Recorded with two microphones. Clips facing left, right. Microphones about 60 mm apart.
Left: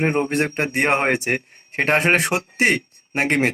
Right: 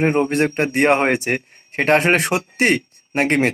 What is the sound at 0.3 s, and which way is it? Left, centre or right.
Speech, centre.